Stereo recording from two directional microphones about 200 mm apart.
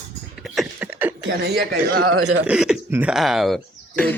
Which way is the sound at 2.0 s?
90° right.